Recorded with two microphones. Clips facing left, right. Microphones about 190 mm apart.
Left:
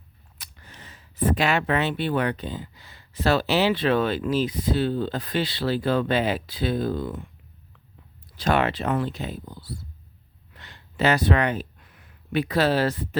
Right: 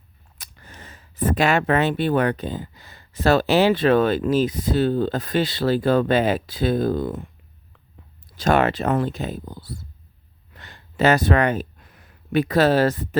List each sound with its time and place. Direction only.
0.3 s speech: 45° right (ahead or behind)
8.4 s speech: 45° right (ahead or behind)